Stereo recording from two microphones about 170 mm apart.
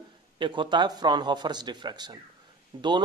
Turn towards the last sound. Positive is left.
turn(degrees=-25)  # may be behind; listen again after turning